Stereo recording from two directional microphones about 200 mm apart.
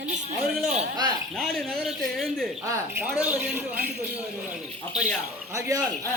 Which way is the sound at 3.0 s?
5° right (ahead or behind).